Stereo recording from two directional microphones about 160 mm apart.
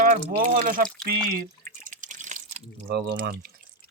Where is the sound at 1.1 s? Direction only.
60° right (ahead or behind).